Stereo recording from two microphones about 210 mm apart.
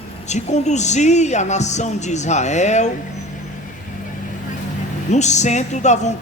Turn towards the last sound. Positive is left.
turn(degrees=35)  # may be behind; listen again after turning